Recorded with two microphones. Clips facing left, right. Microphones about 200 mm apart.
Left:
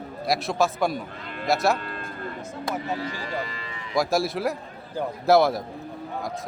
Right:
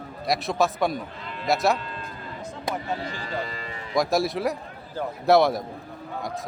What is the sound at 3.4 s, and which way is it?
Speech, 40° right (ahead or behind).